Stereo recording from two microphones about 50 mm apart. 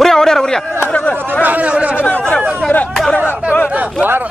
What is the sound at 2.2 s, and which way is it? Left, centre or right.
Speech, centre.